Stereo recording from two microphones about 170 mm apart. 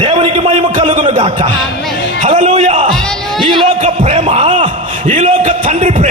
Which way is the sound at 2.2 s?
45° right (ahead or behind).